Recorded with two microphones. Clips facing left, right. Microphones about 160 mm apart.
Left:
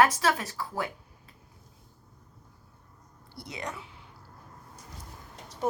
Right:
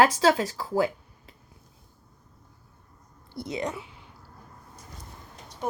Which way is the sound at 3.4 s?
25° right (ahead or behind).